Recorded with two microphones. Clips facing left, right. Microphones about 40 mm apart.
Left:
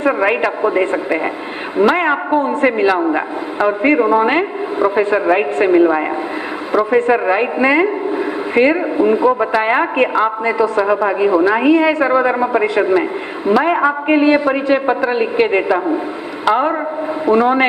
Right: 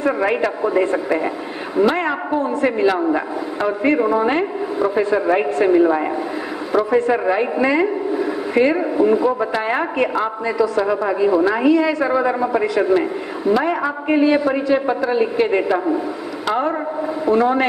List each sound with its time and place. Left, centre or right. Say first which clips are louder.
0.0 s a woman's voice: left 3 dB; left
13.7 s a woman's voice: left 4 dB; left